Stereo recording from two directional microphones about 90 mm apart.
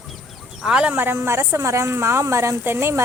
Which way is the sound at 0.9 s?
25° right (ahead or behind).